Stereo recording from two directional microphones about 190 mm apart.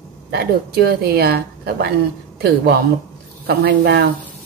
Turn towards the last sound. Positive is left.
turn(degrees=-60)  # may be behind; listen again after turning